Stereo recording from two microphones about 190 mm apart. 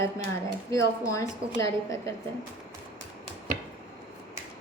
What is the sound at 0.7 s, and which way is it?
A woman's voice, 15° left (ahead or behind).